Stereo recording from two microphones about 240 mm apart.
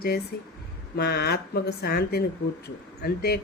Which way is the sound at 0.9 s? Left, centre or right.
Left.